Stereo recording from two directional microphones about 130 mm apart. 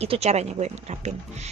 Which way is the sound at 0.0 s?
55° right (ahead or behind).